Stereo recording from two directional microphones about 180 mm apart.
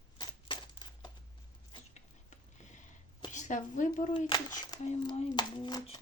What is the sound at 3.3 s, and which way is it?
Speech, 45° left (ahead or behind).